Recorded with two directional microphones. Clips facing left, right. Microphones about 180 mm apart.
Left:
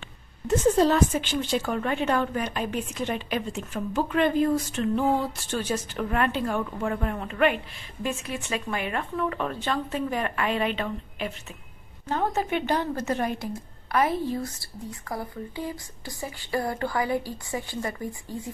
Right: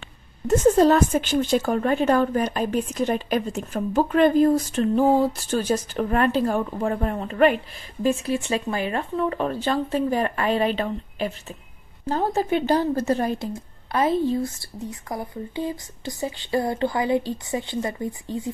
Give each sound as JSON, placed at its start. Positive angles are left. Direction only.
{"t": 0.5, "sound": "a woman's voice", "side_deg": -45}